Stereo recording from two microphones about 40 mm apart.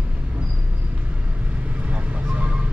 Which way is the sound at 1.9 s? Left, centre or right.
Right.